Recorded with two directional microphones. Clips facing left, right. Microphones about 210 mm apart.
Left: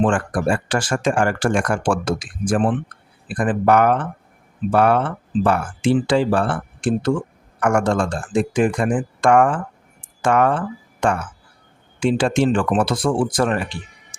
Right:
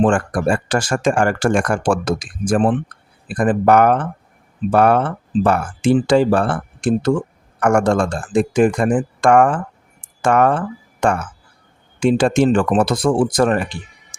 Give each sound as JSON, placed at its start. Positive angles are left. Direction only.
{"t": 0.0, "sound": "speech", "side_deg": -40}